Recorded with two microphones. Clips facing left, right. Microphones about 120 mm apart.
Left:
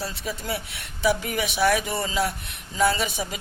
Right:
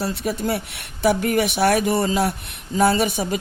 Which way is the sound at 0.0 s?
60° right (ahead or behind).